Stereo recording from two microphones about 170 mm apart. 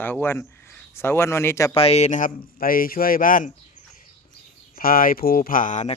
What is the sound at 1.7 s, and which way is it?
Speech, 35° left (ahead or behind).